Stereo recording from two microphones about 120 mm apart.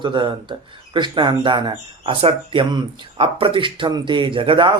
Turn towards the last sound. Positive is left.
turn(degrees=-45)  # may be behind; listen again after turning